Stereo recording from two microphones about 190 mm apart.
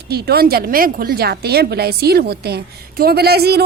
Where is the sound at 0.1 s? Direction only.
55° right (ahead or behind).